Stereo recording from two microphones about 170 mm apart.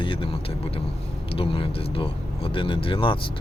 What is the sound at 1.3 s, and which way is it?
Speech, 35° left (ahead or behind).